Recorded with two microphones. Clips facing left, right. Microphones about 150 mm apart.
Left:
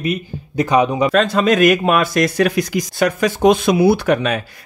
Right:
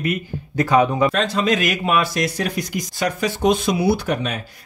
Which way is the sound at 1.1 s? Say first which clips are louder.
Left 6 dB; 55° left (ahead or behind).